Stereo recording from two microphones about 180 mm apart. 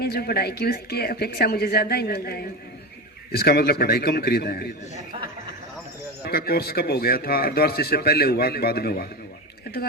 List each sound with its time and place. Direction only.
0.0 s a man's voice: 60° left (ahead or behind)
6.2 s a man's voice: 55° left (ahead or behind)